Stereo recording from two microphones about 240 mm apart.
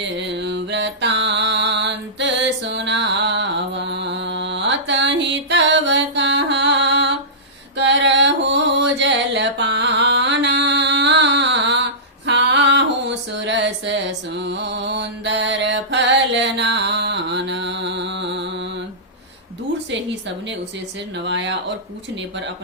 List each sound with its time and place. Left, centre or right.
0.2 s mantra: right
7.8 s music: right
12.2 s a sound: right
14.6 s mantra: right
19.9 s a sound: right
21.2 s speech: right